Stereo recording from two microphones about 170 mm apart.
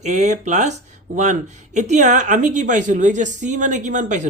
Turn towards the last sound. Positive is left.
turn(degrees=-45)  # may be behind; listen again after turning